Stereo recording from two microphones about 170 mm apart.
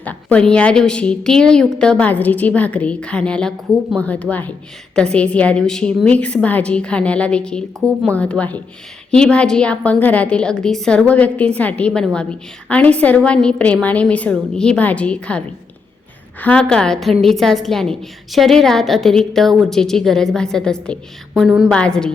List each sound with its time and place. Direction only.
0.0 s a woman's voice: 10° left (ahead or behind)